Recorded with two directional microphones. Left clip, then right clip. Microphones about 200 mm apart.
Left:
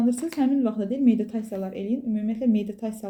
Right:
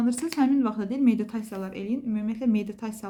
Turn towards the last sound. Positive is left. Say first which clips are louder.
# left 3 dB
turn(degrees=-30)  # may be behind; listen again after turning